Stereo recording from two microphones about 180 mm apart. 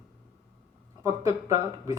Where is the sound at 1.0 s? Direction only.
15° right (ahead or behind).